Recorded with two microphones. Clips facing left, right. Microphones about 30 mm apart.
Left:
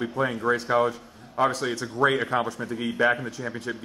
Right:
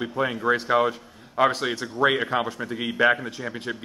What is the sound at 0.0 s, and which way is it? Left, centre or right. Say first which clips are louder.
A man's voice: right 1 dB; centre.